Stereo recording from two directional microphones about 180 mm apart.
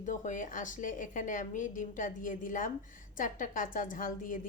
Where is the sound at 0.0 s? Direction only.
45° left (ahead or behind).